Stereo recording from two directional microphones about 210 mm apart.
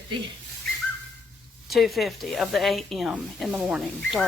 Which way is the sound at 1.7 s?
Centre (ahead or behind).